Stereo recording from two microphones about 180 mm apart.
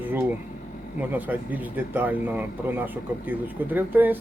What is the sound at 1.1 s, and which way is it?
Speech, 10° right (ahead or behind).